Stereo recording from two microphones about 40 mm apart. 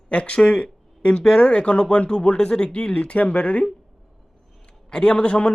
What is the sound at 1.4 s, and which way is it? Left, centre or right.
Speech, left.